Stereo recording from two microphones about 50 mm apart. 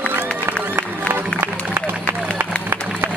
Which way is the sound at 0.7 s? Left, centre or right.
Right.